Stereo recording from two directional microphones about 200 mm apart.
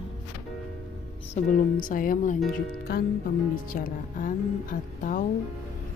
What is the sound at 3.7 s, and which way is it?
Speech, 45° left (ahead or behind).